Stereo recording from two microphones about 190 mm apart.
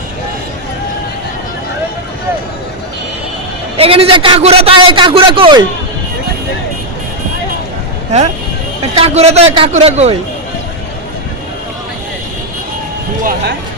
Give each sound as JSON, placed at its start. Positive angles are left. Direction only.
{"t": 3.8, "sound": "a man's voice", "side_deg": -30}
{"t": 9.0, "sound": "speech", "side_deg": -35}